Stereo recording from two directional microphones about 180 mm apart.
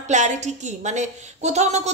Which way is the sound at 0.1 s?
40° right (ahead or behind).